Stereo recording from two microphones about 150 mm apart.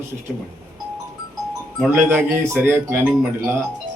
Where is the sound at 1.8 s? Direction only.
15° right (ahead or behind).